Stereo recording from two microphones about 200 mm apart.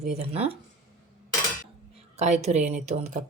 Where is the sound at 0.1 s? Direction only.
30° right (ahead or behind).